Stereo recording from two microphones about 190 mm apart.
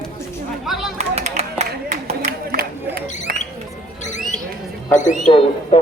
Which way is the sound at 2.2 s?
55° right (ahead or behind).